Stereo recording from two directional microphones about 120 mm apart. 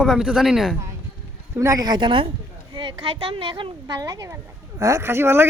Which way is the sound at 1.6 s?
30° right (ahead or behind).